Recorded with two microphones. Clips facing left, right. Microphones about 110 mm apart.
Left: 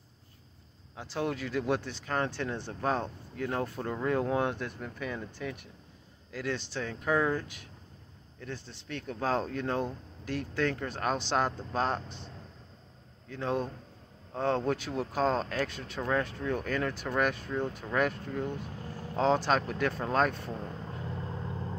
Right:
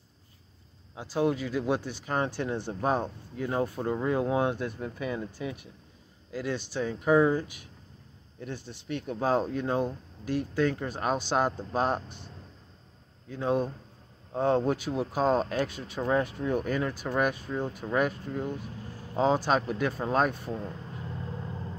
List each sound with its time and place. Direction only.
1.1 s speech: 5° right (ahead or behind)
13.3 s speech: 10° right (ahead or behind)